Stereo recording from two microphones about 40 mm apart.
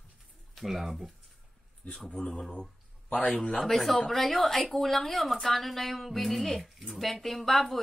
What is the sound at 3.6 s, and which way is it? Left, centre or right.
Speech, centre.